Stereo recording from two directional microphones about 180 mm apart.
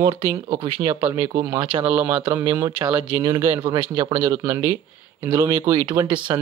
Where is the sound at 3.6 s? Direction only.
25° right (ahead or behind).